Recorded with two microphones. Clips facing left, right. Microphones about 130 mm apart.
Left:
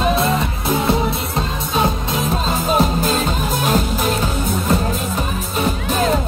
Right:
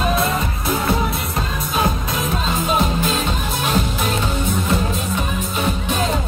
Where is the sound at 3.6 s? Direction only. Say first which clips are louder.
Left 2 dB; 40° left (ahead or behind).